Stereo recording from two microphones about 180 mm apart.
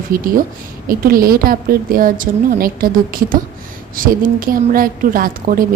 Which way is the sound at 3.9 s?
50° right (ahead or behind).